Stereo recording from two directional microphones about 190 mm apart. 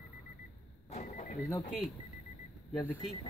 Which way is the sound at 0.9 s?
35° left (ahead or behind).